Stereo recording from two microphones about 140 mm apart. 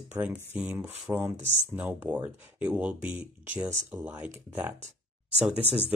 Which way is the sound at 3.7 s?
20° right (ahead or behind).